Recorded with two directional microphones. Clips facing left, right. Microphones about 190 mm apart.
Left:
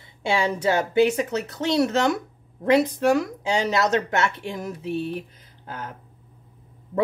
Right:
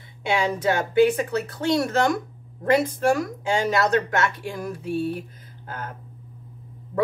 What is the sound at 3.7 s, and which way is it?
Speech, 25° left (ahead or behind).